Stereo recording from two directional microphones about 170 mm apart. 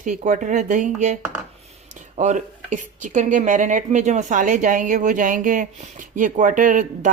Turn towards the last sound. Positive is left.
turn(degrees=-50)  # may be behind; listen again after turning